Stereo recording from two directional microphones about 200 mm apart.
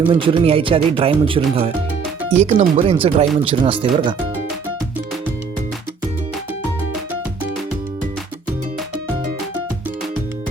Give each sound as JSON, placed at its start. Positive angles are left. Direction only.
{"t": 0.1, "sound": "speech", "side_deg": -25}